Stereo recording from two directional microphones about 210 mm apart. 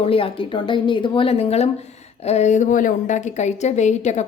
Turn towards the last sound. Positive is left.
turn(degrees=35)  # may be behind; listen again after turning